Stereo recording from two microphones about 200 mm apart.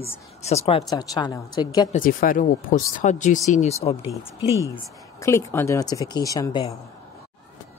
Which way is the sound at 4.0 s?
15° right (ahead or behind).